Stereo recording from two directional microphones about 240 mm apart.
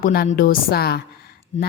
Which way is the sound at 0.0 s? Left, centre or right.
Left.